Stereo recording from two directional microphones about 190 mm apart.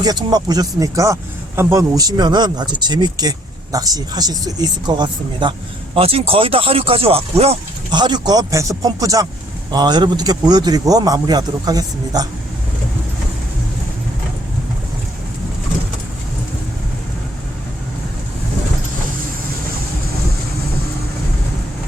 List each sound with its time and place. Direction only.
0.0 s speech: 20° right (ahead or behind)
7.9 s speech: 20° right (ahead or behind)